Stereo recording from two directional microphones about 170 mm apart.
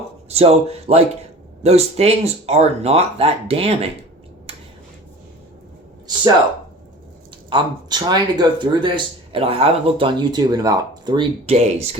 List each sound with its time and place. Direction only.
0.3 s speech: 35° right (ahead or behind)
4.5 s a sound: 35° right (ahead or behind)
7.5 s speech: 25° right (ahead or behind)